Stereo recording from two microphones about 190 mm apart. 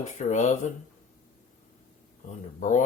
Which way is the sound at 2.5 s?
40° left (ahead or behind).